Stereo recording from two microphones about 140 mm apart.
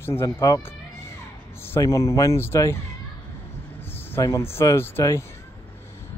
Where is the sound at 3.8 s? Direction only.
15° left (ahead or behind).